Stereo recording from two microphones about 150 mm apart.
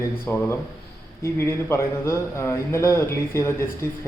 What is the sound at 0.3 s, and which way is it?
A man's voice, 15° left (ahead or behind).